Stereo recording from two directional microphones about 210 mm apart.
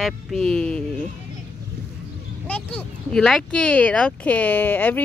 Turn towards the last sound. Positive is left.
turn(degrees=10)  # may be behind; listen again after turning